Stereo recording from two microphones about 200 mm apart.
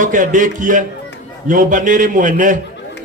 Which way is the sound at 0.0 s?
40° right (ahead or behind).